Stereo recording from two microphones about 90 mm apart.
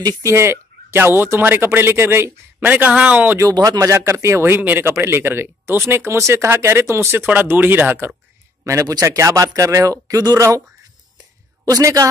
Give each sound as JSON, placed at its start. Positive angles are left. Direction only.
{"t": 0.0, "sound": "speech", "side_deg": -35}
{"t": 3.5, "sound": "speech", "side_deg": -55}
{"t": 3.8, "sound": "a man's voice", "side_deg": -30}
{"t": 8.6, "sound": "a man's voice", "side_deg": -40}
{"t": 11.7, "sound": "a man's voice", "side_deg": -40}